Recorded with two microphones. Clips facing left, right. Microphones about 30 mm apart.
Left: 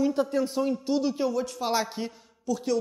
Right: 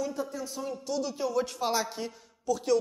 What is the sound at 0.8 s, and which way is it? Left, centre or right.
A man's voice, left.